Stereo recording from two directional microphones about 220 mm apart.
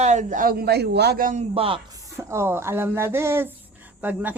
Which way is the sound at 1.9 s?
10° right (ahead or behind).